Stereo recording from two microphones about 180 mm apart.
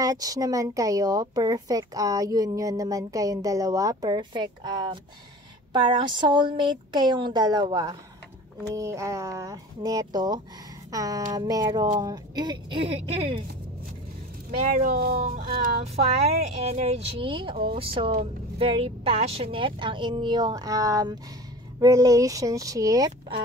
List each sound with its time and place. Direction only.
0.0 s speech: 20° right (ahead or behind)
14.6 s speech: 50° right (ahead or behind)
16.5 s speech: 35° right (ahead or behind); by 23.1 s 20° right (ahead or behind)